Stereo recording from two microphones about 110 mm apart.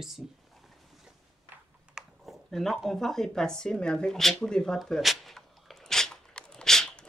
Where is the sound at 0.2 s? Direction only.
5° right (ahead or behind).